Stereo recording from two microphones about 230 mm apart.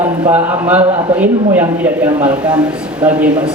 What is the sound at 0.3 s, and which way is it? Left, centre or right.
Speech, centre.